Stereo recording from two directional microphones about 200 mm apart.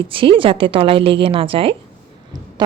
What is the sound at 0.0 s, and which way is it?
A woman's voice, 25° right (ahead or behind).